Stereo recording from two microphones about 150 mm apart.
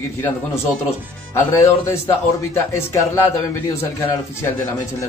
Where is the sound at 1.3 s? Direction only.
20° left (ahead or behind).